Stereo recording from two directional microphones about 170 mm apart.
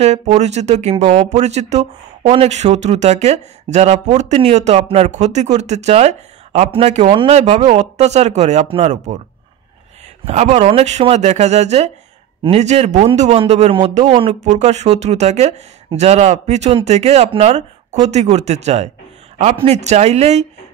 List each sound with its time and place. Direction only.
0.0 s speech: 40° right (ahead or behind)
10.2 s speech: 40° right (ahead or behind)